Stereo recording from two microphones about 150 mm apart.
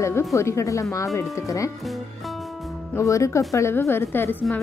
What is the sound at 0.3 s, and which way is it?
Speech, 20° left (ahead or behind).